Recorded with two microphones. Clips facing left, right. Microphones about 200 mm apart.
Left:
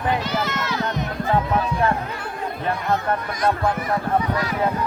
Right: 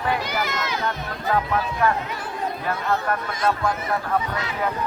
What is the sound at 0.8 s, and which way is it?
Music, 20° left (ahead or behind).